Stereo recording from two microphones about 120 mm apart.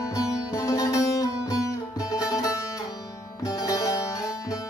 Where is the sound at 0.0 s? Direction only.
25° left (ahead or behind).